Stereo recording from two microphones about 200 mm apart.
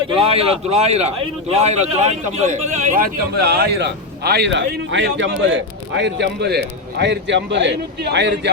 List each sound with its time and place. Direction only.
0.1 s a man's voice: 30° right (ahead or behind); by 8.4 s 60° right (ahead or behind)